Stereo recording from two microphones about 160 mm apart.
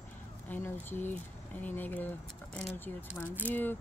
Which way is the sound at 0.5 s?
10° left (ahead or behind).